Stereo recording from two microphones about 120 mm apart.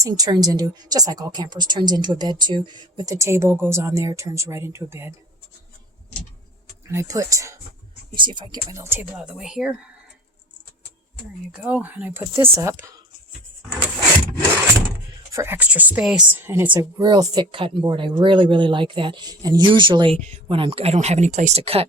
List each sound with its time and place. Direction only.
0.0 s speech: 35° right (ahead or behind)
6.8 s speech: 25° right (ahead or behind)
8.1 s speech: 40° right (ahead or behind)
8.7 s speech: 20° right (ahead or behind)
9.2 s speech: 5° right (ahead or behind)
11.5 s speech: 15° right (ahead or behind)
15.3 s speech: 25° right (ahead or behind)
15.5 s speech: 15° right (ahead or behind)
16.7 s speech: 35° right (ahead or behind)
17.5 s speech: 45° right (ahead or behind)